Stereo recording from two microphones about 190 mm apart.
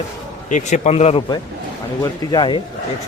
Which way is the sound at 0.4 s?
40° left (ahead or behind).